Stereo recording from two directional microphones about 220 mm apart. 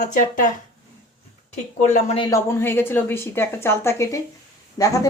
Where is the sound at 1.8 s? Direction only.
30° left (ahead or behind).